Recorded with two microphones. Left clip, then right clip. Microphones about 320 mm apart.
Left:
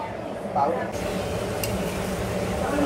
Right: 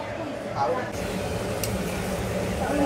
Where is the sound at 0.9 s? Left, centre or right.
Centre.